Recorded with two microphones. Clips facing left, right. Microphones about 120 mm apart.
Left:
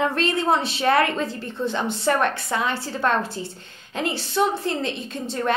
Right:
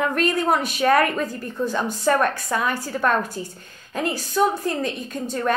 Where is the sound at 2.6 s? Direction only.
25° left (ahead or behind).